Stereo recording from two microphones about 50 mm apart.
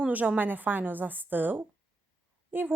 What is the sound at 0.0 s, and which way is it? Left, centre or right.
A woman's voice, right.